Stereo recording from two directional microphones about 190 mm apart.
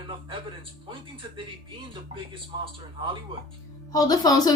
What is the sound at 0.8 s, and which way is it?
Speech, 25° right (ahead or behind).